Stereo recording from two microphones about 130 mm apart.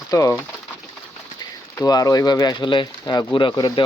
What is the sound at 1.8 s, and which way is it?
Speech, 30° left (ahead or behind).